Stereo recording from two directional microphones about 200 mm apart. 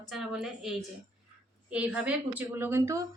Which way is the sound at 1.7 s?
5° right (ahead or behind).